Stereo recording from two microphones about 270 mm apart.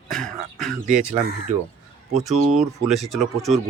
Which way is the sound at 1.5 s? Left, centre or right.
Right.